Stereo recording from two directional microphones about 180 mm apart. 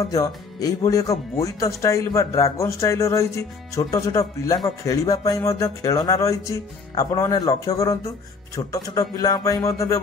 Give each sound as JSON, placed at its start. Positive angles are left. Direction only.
{"t": 0.1, "sound": "a man's voice", "side_deg": 20}